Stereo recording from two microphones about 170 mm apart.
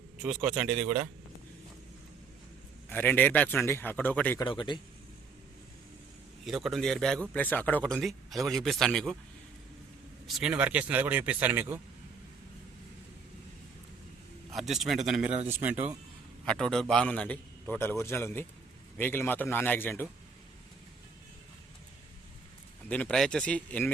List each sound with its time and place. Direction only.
0.2 s a man's voice: 5° right (ahead or behind)
2.9 s a man's voice: 10° left (ahead or behind)
4.4 s speech: 25° left (ahead or behind)
6.4 s a man's voice: centre (ahead or behind)
10.2 s speech: 5° right (ahead or behind)
14.5 s a man's voice: centre (ahead or behind)
16.5 s a man's voice: 5° left (ahead or behind)
22.9 s a man's voice: 10° left (ahead or behind)